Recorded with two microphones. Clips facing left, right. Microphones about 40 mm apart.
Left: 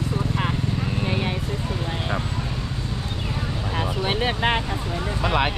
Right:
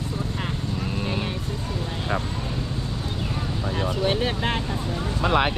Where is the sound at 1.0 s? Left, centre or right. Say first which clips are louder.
Left 3 dB; centre.